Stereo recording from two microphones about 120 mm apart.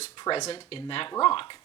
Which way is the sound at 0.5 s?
45° left (ahead or behind).